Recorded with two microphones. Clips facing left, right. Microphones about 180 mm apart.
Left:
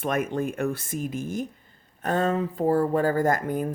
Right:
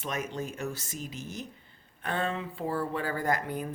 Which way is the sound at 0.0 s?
55° left (ahead or behind).